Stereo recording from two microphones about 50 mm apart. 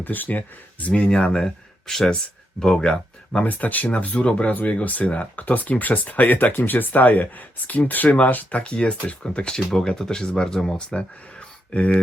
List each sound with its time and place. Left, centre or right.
0.0 s speech: left
8.4 s speech: left